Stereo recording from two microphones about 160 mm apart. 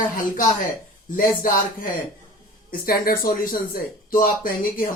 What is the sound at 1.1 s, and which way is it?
Speech, 60° left (ahead or behind).